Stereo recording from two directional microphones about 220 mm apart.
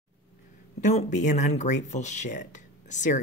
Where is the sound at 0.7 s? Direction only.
35° left (ahead or behind).